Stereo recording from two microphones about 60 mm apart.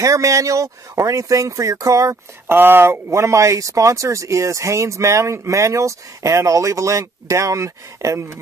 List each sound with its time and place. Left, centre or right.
0.0 s speech: right
2.4 s speech: right